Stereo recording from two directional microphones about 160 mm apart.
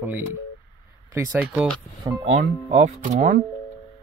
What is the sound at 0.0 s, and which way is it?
Speech, 10° right (ahead or behind).